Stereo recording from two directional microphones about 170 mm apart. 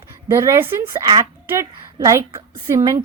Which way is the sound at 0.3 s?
15° right (ahead or behind).